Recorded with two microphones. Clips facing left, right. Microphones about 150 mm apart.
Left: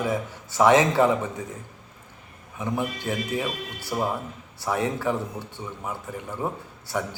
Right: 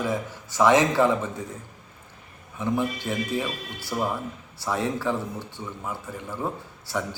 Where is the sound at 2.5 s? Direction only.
15° left (ahead or behind).